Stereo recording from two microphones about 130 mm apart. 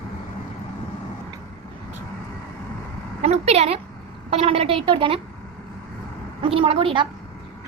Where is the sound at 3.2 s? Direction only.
55° right (ahead or behind).